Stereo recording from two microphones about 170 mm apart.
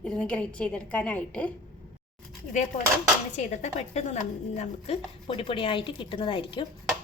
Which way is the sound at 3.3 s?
40° left (ahead or behind).